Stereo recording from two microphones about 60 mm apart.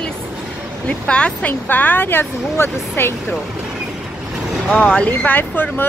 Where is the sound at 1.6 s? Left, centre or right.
Left.